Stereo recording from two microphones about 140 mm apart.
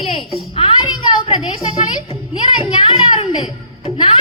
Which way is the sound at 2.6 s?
40° left (ahead or behind).